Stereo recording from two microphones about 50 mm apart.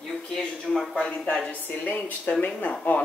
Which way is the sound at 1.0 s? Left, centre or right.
Left.